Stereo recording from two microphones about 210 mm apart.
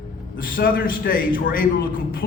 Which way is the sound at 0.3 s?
45° left (ahead or behind).